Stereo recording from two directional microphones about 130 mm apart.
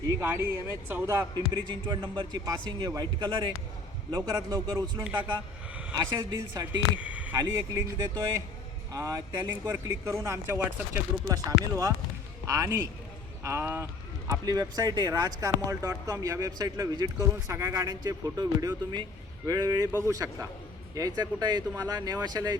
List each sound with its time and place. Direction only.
0.2 s speech: 15° right (ahead or behind)
1.9 s a man's voice: 35° right (ahead or behind)
6.5 s speech: 30° right (ahead or behind)
7.0 s a sound: 10° right (ahead or behind)
7.3 s a man's voice: 20° right (ahead or behind)